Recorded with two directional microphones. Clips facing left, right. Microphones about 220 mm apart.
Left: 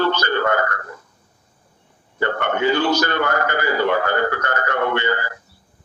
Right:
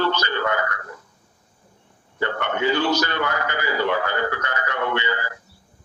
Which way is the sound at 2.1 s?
50° left (ahead or behind).